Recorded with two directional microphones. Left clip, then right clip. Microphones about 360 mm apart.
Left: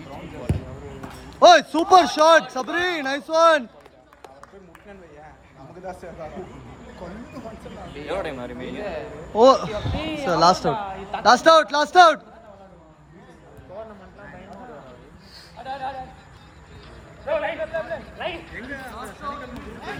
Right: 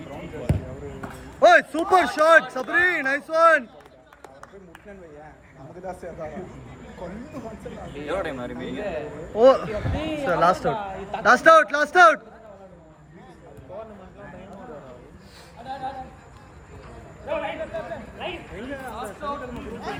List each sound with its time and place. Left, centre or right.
1.0 s a sound: centre
1.9 s speech: centre
5.8 s speech: centre
7.9 s a man's voice: centre
9.4 s speech: centre
9.9 s a man's voice: centre
11.2 s speech: centre
15.6 s speech: centre
17.2 s a man's voice: left